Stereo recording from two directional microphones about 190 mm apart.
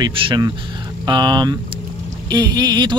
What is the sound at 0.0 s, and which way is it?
Speech, 25° right (ahead or behind).